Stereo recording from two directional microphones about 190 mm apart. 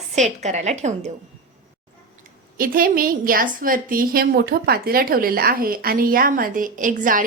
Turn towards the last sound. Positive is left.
turn(degrees=-45)  # may be behind; listen again after turning